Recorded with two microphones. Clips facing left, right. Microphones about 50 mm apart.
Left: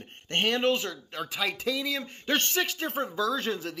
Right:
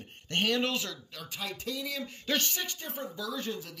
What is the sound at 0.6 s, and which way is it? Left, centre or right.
Speech, left.